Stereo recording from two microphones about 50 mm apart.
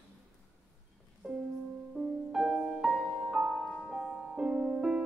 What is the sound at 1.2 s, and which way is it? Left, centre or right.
Music, centre.